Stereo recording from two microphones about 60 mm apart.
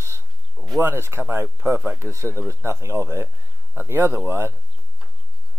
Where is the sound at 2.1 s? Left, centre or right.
Right.